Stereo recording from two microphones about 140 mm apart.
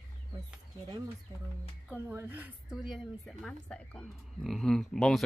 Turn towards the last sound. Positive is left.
turn(degrees=5)  # may be behind; listen again after turning